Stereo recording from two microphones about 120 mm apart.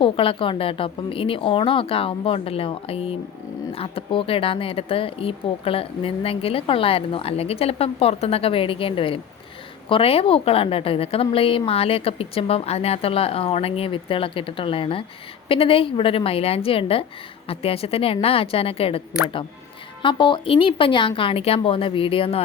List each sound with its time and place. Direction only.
0.0 s speech: 50° left (ahead or behind)